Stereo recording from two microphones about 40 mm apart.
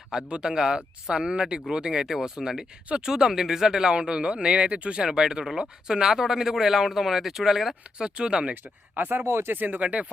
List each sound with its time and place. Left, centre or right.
0.1 s speech: right
3.9 s speech: right
5.0 s speech: centre
7.9 s speech: right
9.0 s speech: right
9.6 s speech: right
9.8 s speech: right